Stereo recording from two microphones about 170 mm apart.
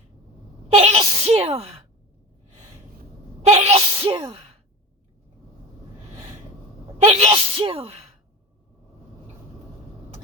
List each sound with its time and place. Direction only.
0.7 s sneeze: 35° right (ahead or behind)
3.4 s sneeze: 40° right (ahead or behind)
7.0 s speech: 35° right (ahead or behind)